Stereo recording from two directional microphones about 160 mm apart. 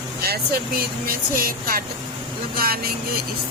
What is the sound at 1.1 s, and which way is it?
Speech, 65° right (ahead or behind).